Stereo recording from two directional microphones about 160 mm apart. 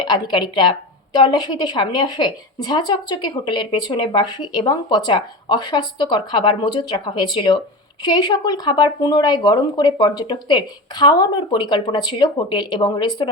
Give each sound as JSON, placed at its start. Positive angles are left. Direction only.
{"t": 0.0, "sound": "a woman's voice", "side_deg": 30}